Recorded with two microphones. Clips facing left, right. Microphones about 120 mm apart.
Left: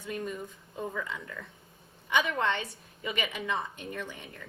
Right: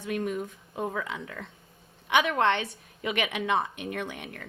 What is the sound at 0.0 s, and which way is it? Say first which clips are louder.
Speech: right 5 dB; 75° right (ahead or behind).